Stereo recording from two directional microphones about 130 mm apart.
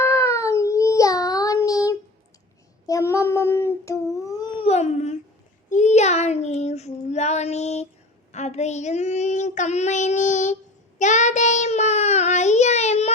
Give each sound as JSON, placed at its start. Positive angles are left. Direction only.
{"t": 0.0, "sound": "a sound", "side_deg": 20}
{"t": 0.4, "sound": "child singing", "side_deg": 25}
{"t": 4.6, "sound": "babbling", "side_deg": 55}
{"t": 5.6, "sound": "child singing", "side_deg": 70}